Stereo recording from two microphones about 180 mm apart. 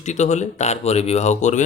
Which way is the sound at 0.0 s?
40° left (ahead or behind).